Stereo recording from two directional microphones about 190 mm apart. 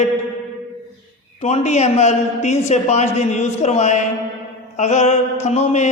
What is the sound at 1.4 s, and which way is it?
Speech, 35° left (ahead or behind).